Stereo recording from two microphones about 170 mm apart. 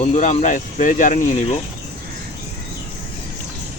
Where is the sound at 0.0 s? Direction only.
45° left (ahead or behind).